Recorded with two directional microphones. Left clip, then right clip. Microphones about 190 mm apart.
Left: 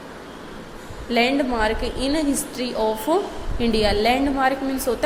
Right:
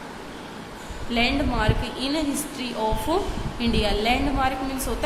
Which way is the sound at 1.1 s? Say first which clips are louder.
Left 4 dB; 25° left (ahead or behind).